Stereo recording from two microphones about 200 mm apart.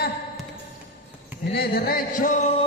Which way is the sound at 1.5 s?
50° left (ahead or behind).